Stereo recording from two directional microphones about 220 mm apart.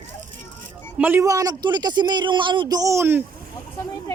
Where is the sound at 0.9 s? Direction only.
10° right (ahead or behind).